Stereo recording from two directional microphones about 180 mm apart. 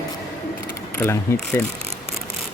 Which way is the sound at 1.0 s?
15° left (ahead or behind).